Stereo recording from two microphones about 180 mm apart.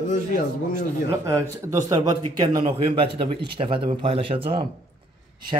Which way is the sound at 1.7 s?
20° right (ahead or behind).